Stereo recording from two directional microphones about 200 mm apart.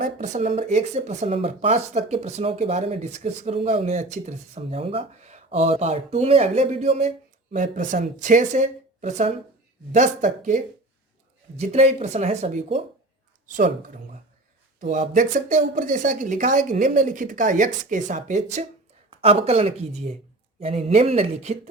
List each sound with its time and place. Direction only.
0.0 s speech: 35° right (ahead or behind)